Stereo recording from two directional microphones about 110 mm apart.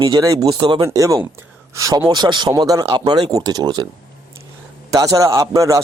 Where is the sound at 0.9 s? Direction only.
30° right (ahead or behind).